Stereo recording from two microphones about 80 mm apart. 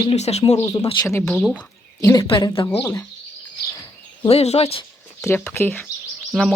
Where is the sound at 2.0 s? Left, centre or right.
Left.